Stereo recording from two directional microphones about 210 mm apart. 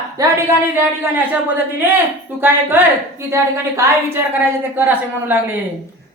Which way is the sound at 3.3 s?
15° right (ahead or behind).